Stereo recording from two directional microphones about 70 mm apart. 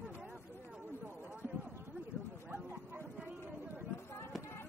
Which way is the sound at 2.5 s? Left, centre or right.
Right.